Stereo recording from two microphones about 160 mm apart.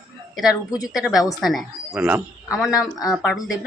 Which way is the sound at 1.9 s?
15° right (ahead or behind).